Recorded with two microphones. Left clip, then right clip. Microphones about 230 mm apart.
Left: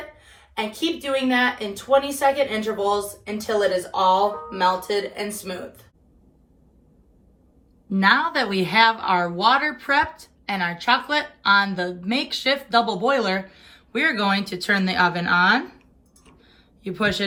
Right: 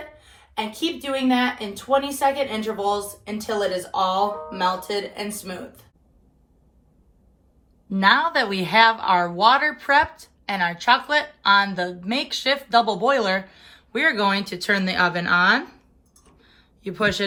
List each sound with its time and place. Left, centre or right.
0.5 s speech: centre
7.9 s speech: centre
16.2 s a sound: centre